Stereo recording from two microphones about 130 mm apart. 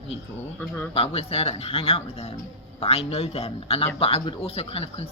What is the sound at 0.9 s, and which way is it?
Speech, 50° left (ahead or behind).